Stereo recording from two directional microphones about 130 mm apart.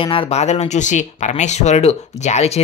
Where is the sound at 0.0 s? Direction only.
45° left (ahead or behind).